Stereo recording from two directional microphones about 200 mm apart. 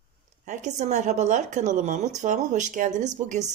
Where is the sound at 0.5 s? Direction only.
35° right (ahead or behind).